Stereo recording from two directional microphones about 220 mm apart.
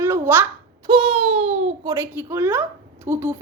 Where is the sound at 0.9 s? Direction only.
25° right (ahead or behind).